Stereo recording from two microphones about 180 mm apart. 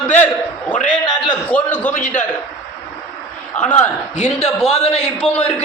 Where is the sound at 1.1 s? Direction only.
25° left (ahead or behind).